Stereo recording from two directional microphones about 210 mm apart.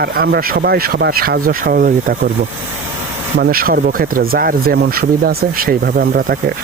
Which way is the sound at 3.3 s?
45° right (ahead or behind).